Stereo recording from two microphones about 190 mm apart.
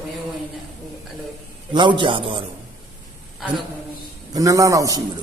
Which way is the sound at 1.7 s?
25° right (ahead or behind).